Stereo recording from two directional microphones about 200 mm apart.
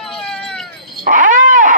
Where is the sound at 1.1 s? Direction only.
40° right (ahead or behind).